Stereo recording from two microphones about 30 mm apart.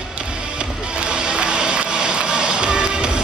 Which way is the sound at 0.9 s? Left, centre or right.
Right.